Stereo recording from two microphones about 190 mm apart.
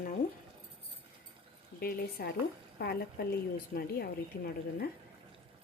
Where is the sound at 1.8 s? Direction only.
55° left (ahead or behind).